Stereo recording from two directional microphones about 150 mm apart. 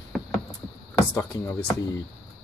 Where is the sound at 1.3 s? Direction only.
25° left (ahead or behind).